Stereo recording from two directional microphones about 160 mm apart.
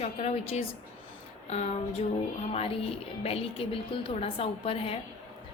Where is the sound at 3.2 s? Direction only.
40° left (ahead or behind).